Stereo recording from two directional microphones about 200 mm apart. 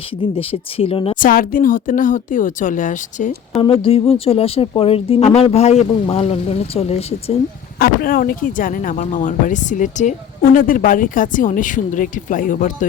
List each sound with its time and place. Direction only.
0.2 s speech: 30° left (ahead or behind)
1.1 s speech: 45° left (ahead or behind)
3.6 s speech: 25° left (ahead or behind)
7.8 s speech: 45° left (ahead or behind)